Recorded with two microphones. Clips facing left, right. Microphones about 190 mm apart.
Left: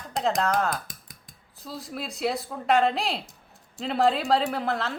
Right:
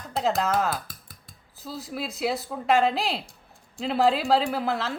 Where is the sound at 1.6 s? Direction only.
Centre (ahead or behind).